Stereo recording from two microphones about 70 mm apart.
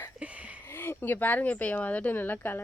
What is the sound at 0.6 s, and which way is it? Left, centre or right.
Speech, left.